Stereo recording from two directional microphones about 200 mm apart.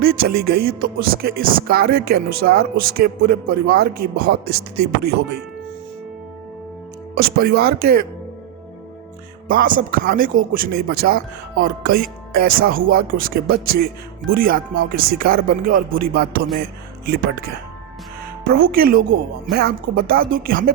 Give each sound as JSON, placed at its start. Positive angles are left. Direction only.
{"t": 0.0, "sound": "speech", "side_deg": -50}
{"t": 7.2, "sound": "speech", "side_deg": -50}
{"t": 9.5, "sound": "speech", "side_deg": -45}
{"t": 18.4, "sound": "speech", "side_deg": -50}